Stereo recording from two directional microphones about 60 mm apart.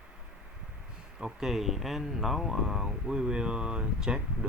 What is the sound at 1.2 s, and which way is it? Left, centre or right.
Speech, centre.